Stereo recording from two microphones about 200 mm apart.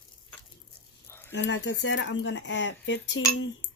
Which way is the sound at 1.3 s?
65° left (ahead or behind).